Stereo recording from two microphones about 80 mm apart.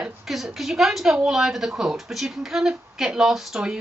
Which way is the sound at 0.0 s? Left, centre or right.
Centre.